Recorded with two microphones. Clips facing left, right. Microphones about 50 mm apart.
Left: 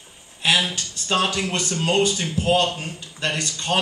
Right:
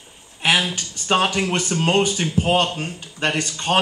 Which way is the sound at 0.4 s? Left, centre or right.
Right.